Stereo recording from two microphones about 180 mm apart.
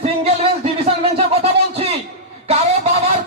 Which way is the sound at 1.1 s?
35° right (ahead or behind).